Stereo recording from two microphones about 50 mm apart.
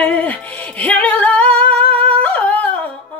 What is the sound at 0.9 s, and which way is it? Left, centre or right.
Singing, left.